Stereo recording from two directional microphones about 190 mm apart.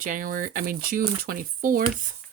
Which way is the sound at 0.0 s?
45° right (ahead or behind).